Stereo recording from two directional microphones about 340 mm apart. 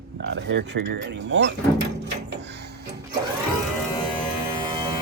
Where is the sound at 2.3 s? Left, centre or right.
Right.